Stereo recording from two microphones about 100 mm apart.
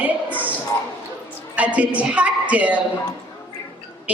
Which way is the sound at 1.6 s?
15° right (ahead or behind).